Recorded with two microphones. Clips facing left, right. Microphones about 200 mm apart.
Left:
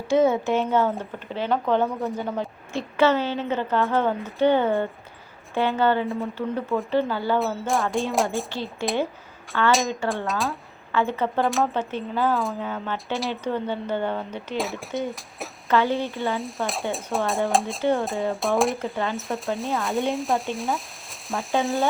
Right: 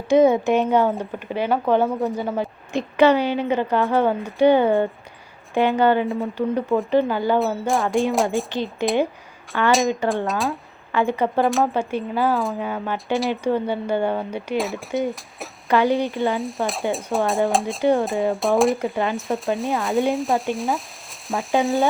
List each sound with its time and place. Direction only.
0.1 s a woman's voice: 15° right (ahead or behind)
7.3 s speech: centre (ahead or behind)
8.4 s a woman's voice: 15° right (ahead or behind)
9.5 s speech: centre (ahead or behind)
10.9 s a woman's voice: 15° right (ahead or behind)
11.4 s speech: centre (ahead or behind)
11.7 s a woman's voice: 10° right (ahead or behind)
12.3 s speech: centre (ahead or behind)
12.5 s a woman's voice: 10° right (ahead or behind)
14.6 s speech: centre (ahead or behind)
15.7 s a woman's voice: 15° right (ahead or behind)
16.4 s speech: centre (ahead or behind)